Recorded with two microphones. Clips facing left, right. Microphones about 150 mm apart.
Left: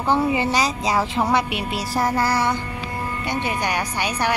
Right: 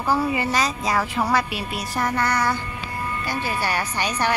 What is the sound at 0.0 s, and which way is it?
A woman's voice, 25° left (ahead or behind).